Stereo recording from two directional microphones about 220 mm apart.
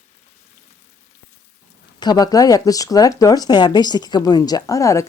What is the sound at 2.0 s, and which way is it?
Speech, 20° left (ahead or behind).